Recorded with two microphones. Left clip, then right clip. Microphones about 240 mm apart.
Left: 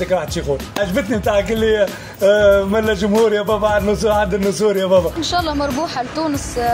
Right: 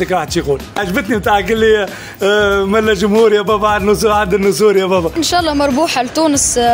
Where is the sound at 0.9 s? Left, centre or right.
Right.